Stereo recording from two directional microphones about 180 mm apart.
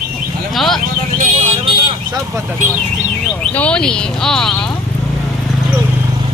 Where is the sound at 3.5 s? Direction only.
5° left (ahead or behind).